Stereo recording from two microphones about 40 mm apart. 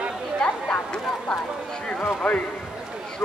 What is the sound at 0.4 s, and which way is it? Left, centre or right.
Chatter, left.